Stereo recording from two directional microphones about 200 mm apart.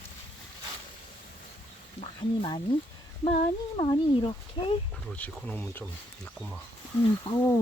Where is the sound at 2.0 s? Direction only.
25° left (ahead or behind).